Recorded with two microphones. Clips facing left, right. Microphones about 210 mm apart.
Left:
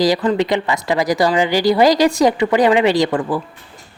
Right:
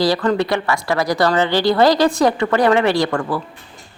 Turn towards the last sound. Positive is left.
turn(degrees=15)  # may be behind; listen again after turning